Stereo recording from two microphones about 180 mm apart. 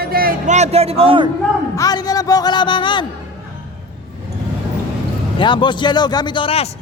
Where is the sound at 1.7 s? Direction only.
20° left (ahead or behind).